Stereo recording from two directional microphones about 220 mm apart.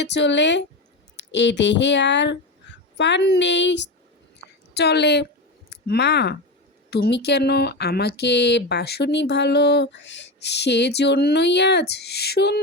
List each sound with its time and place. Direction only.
0.0 s speech: 50° left (ahead or behind)